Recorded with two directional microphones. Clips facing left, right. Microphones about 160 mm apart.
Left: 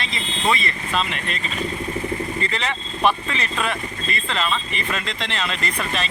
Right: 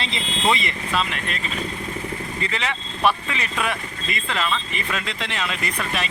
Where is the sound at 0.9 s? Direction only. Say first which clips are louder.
Even; centre (ahead or behind).